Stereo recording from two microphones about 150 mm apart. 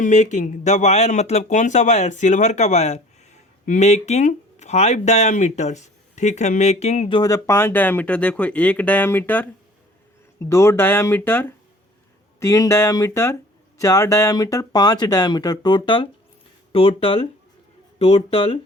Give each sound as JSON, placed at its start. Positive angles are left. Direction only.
{"t": 0.0, "sound": "speech", "side_deg": 50}
{"t": 7.1, "sound": "speech", "side_deg": 25}
{"t": 10.5, "sound": "speech", "side_deg": 20}